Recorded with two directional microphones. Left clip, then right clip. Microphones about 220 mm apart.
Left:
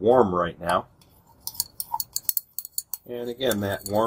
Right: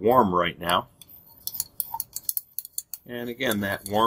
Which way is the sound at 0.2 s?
25° right (ahead or behind).